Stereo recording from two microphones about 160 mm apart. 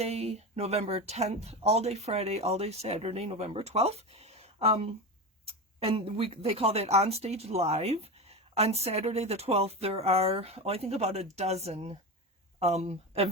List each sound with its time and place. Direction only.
0.0 s speech: 40° right (ahead or behind)